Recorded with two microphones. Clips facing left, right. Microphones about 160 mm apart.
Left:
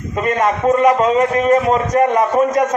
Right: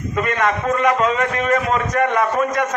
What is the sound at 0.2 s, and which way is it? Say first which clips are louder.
A man's voice: left 4 dB; 35° left (ahead or behind).